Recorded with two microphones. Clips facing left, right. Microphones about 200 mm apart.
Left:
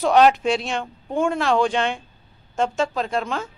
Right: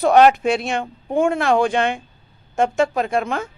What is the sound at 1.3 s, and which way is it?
Speech, 55° right (ahead or behind).